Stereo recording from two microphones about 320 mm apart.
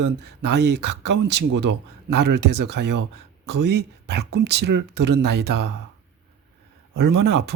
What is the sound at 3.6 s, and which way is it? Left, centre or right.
Speech, right.